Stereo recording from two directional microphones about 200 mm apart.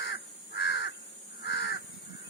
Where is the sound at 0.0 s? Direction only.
55° left (ahead or behind).